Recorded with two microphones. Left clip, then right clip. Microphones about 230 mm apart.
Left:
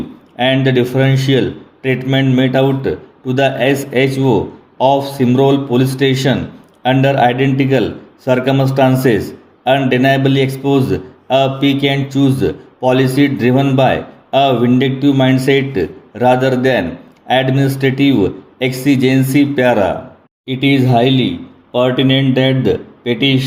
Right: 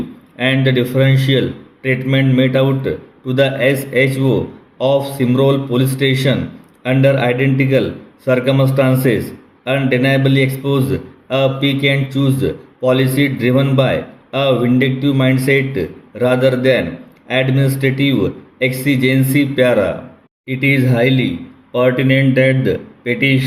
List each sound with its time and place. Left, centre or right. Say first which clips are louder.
0.3 s a man's voice: left 2 dB; left
21.1 s a man's voice: left 2 dB; centre